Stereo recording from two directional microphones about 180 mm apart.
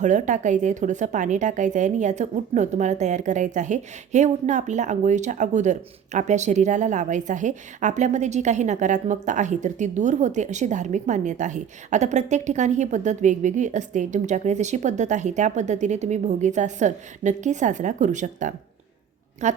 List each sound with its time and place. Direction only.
0.0 s a woman's voice: 40° right (ahead or behind)